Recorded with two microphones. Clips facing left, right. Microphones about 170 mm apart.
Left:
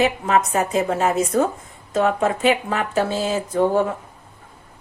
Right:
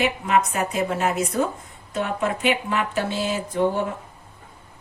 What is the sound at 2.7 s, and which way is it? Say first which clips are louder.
Speech: left 3 dB; 40° left (ahead or behind).